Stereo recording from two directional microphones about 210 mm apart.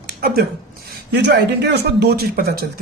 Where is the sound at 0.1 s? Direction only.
50° right (ahead or behind).